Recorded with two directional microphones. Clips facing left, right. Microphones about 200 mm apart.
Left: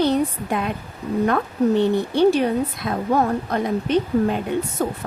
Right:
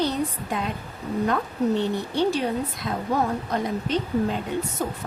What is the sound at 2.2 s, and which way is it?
Speech, 55° left (ahead or behind).